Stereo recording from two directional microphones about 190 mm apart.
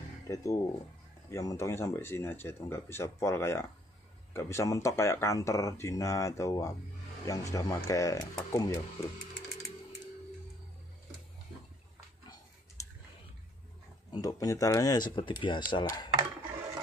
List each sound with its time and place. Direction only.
0.3 s speech: 15° left (ahead or behind)
12.8 s a sound: 15° left (ahead or behind)
14.1 s speech: 20° left (ahead or behind)